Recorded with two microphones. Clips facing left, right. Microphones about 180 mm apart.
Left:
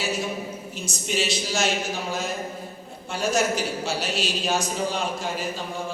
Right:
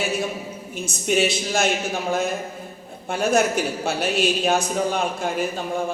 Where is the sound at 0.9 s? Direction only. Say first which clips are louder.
Right 6 dB; 55° right (ahead or behind).